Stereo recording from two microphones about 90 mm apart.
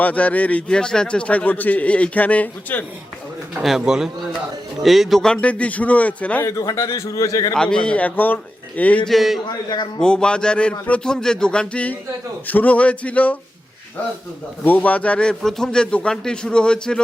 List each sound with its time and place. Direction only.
0.0 s a man's voice: 15° left (ahead or behind)
3.8 s a man's voice: 5° right (ahead or behind); by 6.4 s 15° left (ahead or behind)
6.4 s a man's voice: 35° left (ahead or behind)
7.5 s a man's voice: 10° left (ahead or behind)
9.0 s a man's voice: centre (ahead or behind); by 13.3 s 15° left (ahead or behind)
14.6 s a man's voice: 20° left (ahead or behind)